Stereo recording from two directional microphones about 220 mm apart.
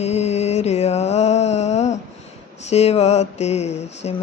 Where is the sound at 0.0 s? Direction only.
30° left (ahead or behind).